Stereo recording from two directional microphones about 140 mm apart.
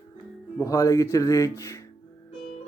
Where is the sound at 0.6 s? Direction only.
25° left (ahead or behind).